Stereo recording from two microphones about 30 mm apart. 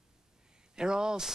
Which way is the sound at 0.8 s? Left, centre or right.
Right.